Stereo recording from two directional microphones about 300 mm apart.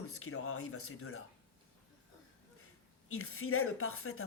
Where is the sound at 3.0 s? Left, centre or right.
Left.